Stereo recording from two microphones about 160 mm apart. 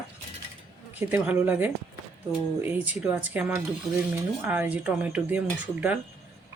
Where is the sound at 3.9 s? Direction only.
Centre (ahead or behind).